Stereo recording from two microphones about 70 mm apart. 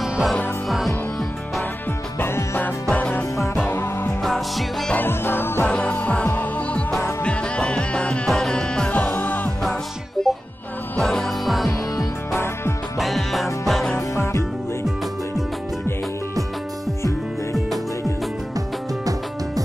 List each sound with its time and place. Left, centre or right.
0.0 s music: centre
2.1 s music: left
4.2 s music: centre
4.9 s music: left
5.7 s music: centre
7.2 s music: centre
9.1 s music: left
10.2 s music: centre
13.0 s music: centre
14.1 s music: left